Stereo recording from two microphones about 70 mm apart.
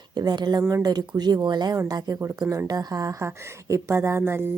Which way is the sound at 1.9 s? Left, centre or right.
Right.